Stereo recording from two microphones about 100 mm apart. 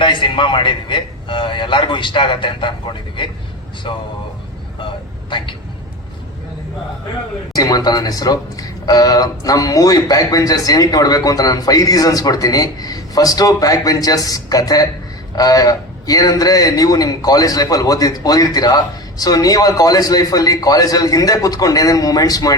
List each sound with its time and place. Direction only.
0.0 s a man's voice: 55° left (ahead or behind)
7.5 s speech: 40° left (ahead or behind)